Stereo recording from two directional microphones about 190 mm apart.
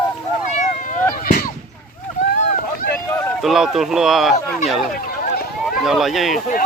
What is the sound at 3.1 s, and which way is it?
Run, 10° left (ahead or behind).